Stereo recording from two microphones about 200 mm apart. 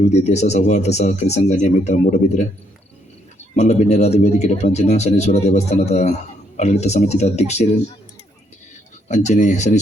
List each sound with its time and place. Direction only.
0.1 s speech: 35° left (ahead or behind)
3.5 s speech: 35° left (ahead or behind)
9.0 s speech: 35° left (ahead or behind)